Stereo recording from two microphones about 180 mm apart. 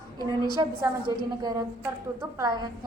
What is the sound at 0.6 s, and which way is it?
Speech, 20° right (ahead or behind).